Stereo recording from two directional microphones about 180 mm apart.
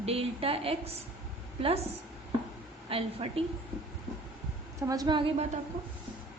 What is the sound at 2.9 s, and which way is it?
Speech, 30° right (ahead or behind).